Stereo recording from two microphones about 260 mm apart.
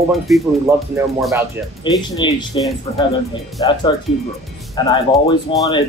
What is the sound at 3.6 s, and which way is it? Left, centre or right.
Speech, centre.